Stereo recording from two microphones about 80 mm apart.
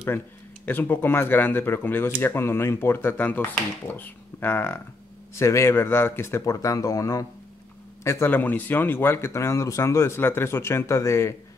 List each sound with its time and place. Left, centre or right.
0.7 s speech: left
6.4 s a man's voice: left
8.3 s speech: left